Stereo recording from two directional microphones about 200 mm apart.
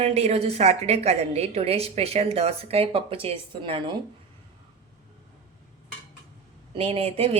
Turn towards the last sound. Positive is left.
turn(degrees=-30)  # may be behind; listen again after turning